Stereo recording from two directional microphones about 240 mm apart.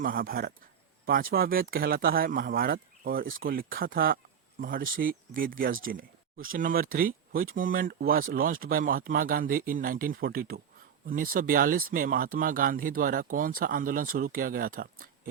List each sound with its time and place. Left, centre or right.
0.0 s speech: right